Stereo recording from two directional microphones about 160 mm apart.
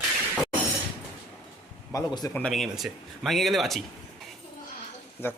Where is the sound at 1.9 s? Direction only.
25° left (ahead or behind).